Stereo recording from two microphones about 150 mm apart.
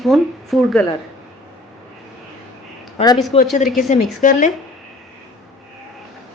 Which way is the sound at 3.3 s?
40° left (ahead or behind).